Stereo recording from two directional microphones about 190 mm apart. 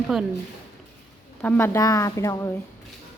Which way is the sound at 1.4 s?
10° left (ahead or behind).